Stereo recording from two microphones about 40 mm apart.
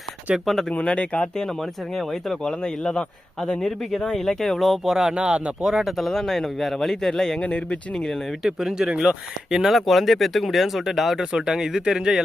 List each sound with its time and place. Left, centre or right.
0.7 s speech: left
2.4 s speech: centre
4.9 s speech: centre
5.6 s speech: centre
7.4 s speech: left
8.4 s speech: centre
9.6 s speech: centre